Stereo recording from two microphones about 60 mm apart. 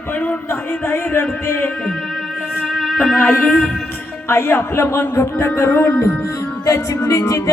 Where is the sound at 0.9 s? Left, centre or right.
Left.